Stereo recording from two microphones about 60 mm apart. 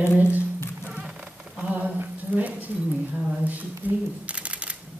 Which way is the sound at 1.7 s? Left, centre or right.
Right.